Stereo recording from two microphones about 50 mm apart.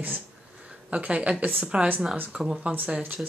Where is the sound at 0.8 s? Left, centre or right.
Right.